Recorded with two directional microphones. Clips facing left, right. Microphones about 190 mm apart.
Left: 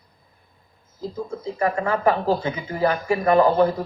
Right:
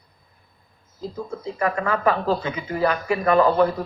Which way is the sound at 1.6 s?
25° left (ahead or behind).